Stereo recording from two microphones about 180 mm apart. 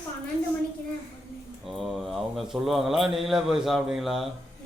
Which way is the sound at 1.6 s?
Centre (ahead or behind).